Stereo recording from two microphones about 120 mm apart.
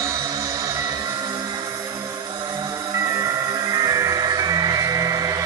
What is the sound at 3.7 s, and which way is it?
Music, 30° right (ahead or behind).